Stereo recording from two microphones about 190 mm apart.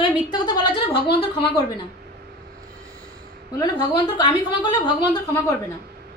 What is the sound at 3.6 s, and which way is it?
A woman's voice, 25° left (ahead or behind).